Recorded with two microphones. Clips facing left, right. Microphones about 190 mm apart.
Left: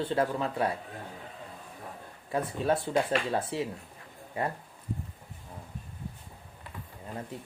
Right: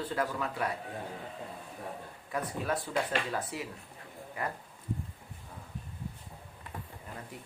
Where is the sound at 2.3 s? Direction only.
30° left (ahead or behind).